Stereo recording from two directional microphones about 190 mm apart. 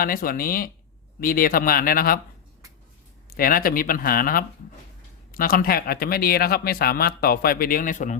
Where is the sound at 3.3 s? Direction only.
50° left (ahead or behind).